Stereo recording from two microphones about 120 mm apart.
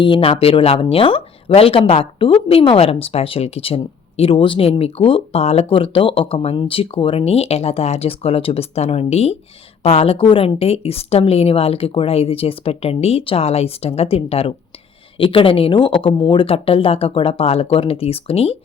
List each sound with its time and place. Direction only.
0.0 s speech: 50° left (ahead or behind)